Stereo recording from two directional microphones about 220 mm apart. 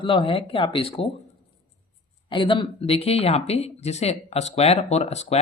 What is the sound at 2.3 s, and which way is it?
Speech, 20° left (ahead or behind).